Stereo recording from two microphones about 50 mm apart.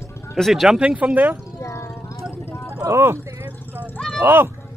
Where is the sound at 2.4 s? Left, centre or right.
Left.